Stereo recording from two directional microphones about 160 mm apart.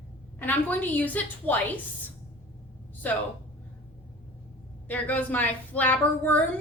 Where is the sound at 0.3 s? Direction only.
10° left (ahead or behind).